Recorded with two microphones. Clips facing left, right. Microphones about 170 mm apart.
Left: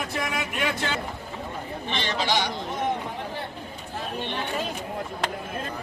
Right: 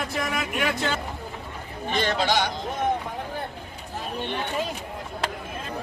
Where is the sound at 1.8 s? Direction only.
45° right (ahead or behind).